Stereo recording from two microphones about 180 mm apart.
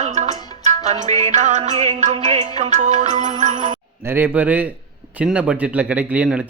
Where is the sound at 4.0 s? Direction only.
10° right (ahead or behind).